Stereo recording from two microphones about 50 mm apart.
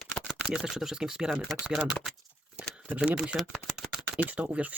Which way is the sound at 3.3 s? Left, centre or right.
Right.